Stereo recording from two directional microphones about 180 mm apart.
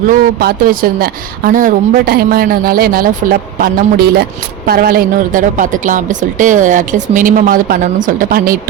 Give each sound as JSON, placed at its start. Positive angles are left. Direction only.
{"t": 0.1, "sound": "a woman's voice", "side_deg": -55}